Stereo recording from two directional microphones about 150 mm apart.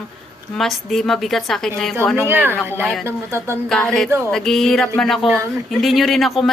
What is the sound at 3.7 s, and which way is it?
A woman's voice, 5° left (ahead or behind).